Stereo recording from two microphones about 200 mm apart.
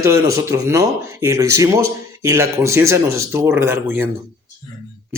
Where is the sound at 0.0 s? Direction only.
15° right (ahead or behind).